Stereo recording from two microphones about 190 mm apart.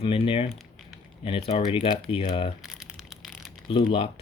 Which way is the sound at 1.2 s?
30° left (ahead or behind).